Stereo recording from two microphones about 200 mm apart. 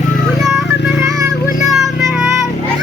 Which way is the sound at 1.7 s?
5° right (ahead or behind).